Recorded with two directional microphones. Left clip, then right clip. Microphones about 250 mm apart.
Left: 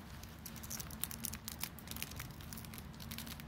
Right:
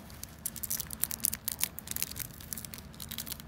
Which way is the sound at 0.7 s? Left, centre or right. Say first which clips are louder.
Right 7 dB; centre.